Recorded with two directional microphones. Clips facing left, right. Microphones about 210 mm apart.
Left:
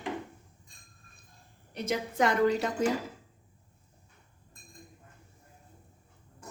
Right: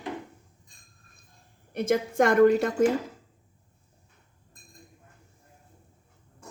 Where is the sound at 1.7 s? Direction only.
50° right (ahead or behind).